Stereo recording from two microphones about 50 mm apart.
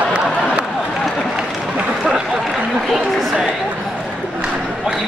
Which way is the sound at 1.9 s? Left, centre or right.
Centre.